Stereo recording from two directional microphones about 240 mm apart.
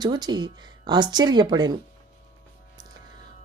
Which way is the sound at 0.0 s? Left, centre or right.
Centre.